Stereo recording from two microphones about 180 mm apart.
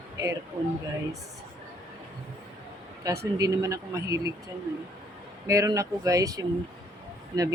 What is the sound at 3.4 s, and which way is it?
Speech, 20° right (ahead or behind).